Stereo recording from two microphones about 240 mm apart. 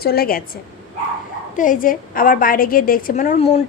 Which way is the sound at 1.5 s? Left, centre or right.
Left.